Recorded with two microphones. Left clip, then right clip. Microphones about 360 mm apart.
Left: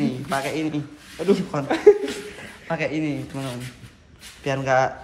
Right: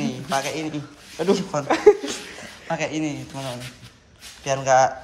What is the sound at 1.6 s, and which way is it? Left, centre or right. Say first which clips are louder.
Speech: even; right.